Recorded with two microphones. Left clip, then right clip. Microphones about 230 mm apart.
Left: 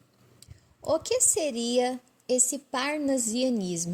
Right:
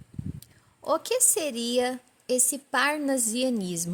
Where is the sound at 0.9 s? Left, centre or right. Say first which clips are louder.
Even; right.